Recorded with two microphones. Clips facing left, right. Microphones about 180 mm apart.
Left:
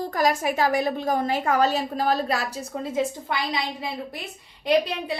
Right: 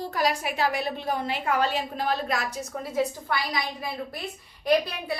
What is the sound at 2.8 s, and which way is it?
A woman's voice, 25° left (ahead or behind).